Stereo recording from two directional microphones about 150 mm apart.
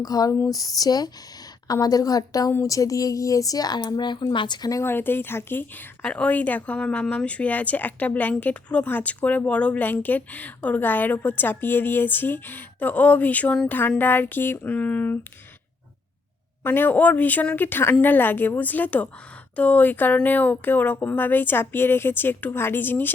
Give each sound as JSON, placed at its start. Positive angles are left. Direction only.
{"t": 0.0, "sound": "speech", "side_deg": 25}
{"t": 16.6, "sound": "speech", "side_deg": 15}